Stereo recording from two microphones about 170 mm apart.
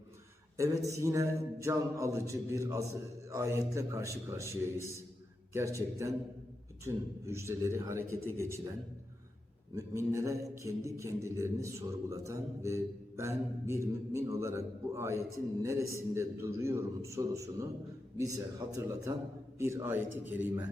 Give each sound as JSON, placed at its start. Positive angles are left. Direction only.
{"t": 0.5, "sound": "a man's voice", "side_deg": -20}
{"t": 9.7, "sound": "a man's voice", "side_deg": -15}